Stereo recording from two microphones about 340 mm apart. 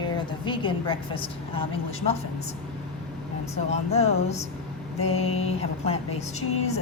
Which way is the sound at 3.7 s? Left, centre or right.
Centre.